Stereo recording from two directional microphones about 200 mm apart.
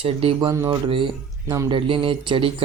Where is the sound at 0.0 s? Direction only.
30° right (ahead or behind).